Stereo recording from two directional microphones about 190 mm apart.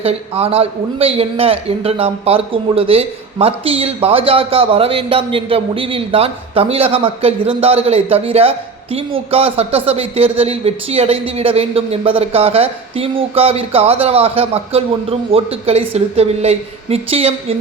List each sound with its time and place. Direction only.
0.0 s a man's voice: 30° right (ahead or behind)